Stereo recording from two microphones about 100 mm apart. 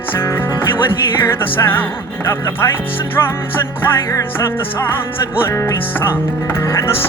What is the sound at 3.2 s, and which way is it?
Speech, 35° left (ahead or behind).